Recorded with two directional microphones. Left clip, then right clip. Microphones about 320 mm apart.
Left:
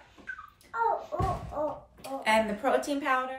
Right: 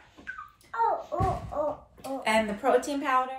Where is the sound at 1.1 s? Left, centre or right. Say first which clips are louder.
Right 3 dB; right.